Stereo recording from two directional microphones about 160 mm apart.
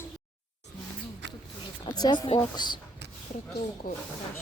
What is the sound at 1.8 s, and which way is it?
Speech, 25° left (ahead or behind).